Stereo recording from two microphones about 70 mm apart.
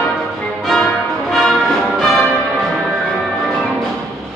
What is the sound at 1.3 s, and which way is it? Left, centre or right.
Music, centre.